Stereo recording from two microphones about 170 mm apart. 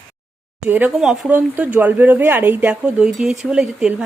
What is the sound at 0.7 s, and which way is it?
Speech, 10° right (ahead or behind).